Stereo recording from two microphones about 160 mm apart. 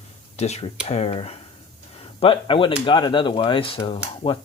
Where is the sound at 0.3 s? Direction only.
40° left (ahead or behind).